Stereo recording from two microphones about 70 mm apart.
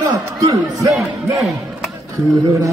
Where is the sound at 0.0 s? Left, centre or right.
Right.